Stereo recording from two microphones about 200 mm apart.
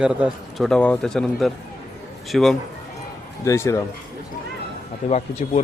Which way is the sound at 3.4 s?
15° left (ahead or behind).